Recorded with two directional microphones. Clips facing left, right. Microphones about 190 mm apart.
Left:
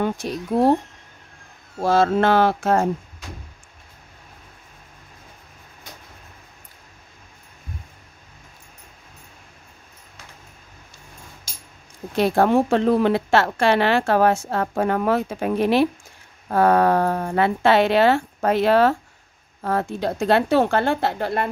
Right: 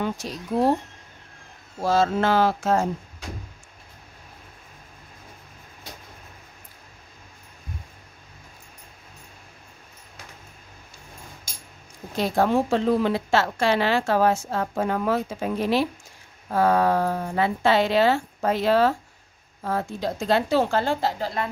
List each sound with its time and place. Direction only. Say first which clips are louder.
0.0 s a woman's voice: left 4 dB; 55° left (ahead or behind)
1.8 s a woman's voice: left 3 dB; 60° left (ahead or behind)
12.2 s a woman's voice: left 4 dB; 60° left (ahead or behind)